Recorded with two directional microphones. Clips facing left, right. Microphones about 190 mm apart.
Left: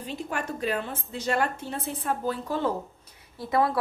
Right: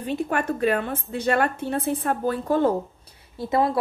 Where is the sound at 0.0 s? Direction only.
60° right (ahead or behind).